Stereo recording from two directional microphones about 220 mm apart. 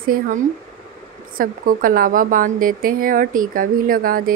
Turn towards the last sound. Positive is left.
turn(degrees=-40)  # may be behind; listen again after turning